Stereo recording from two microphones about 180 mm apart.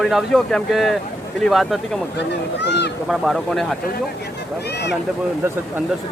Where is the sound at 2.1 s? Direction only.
70° left (ahead or behind).